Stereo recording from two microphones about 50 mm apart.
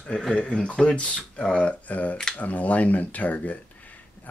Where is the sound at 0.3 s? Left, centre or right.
Centre.